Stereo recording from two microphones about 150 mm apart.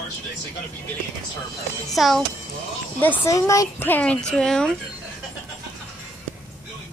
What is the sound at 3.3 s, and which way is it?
Speech, 20° left (ahead or behind).